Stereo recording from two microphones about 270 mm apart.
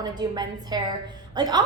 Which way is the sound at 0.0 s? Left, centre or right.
Centre.